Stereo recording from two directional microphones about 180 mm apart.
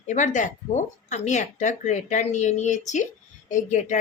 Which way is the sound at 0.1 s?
45° left (ahead or behind).